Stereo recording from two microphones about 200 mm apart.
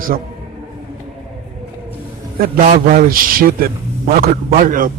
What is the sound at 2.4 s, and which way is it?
A man's voice, 45° right (ahead or behind).